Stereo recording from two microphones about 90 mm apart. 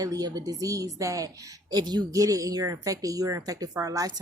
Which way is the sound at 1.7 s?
50° right (ahead or behind).